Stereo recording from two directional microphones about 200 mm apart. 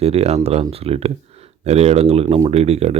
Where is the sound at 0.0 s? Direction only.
30° right (ahead or behind).